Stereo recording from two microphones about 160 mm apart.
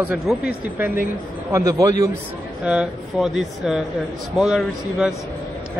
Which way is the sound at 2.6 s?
5° right (ahead or behind).